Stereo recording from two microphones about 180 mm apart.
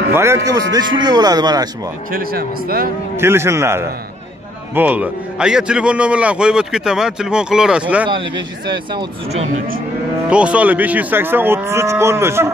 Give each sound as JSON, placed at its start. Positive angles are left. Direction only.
{"t": 0.1, "sound": "speech", "side_deg": -15}
{"t": 2.1, "sound": "speech", "side_deg": -55}
{"t": 3.2, "sound": "cattle", "side_deg": -15}
{"t": 4.7, "sound": "a man's voice", "side_deg": -10}
{"t": 10.3, "sound": "cattle", "side_deg": -5}